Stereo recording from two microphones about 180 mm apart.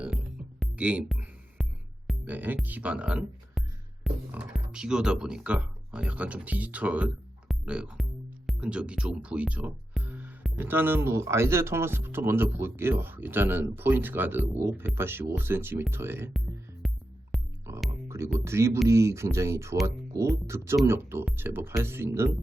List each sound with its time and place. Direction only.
0.6 s music: 5° right (ahead or behind)
2.2 s speech: 10° right (ahead or behind)
16.8 s music: centre (ahead or behind)
18.3 s speech: 15° right (ahead or behind)